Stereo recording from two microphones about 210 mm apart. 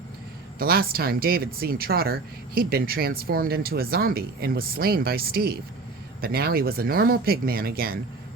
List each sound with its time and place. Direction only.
0.6 s speech: 45° right (ahead or behind)